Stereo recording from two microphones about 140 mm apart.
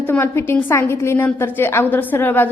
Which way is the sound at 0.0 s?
15° left (ahead or behind).